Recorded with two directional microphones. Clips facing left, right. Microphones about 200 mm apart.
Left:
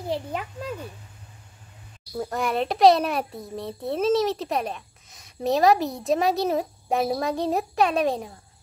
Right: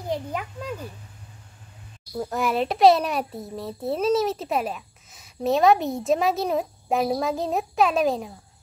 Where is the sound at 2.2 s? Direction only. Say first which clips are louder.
Right 1 dB; centre (ahead or behind).